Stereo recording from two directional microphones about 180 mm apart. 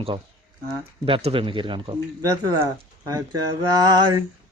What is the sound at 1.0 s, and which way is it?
Speech, 30° right (ahead or behind).